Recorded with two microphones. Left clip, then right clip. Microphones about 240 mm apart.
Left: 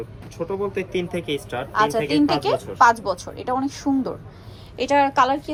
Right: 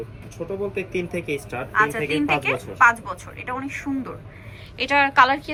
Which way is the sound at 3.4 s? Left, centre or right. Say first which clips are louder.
Left 5 dB; left.